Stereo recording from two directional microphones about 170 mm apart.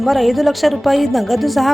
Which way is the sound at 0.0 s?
Centre (ahead or behind).